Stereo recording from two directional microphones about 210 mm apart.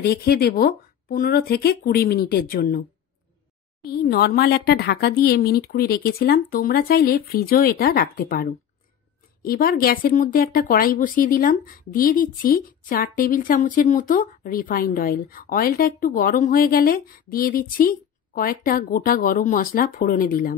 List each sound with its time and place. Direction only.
0.0 s speech: 45° left (ahead or behind)
3.8 s a woman's voice: 50° left (ahead or behind)